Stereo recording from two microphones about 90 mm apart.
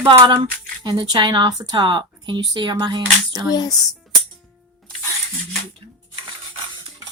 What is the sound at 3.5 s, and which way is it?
Speech, 45° left (ahead or behind).